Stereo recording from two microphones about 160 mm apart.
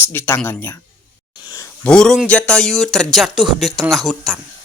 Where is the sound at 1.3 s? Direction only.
25° left (ahead or behind).